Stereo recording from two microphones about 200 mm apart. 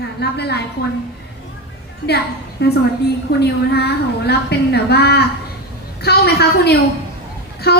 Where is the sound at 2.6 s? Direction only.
55° left (ahead or behind).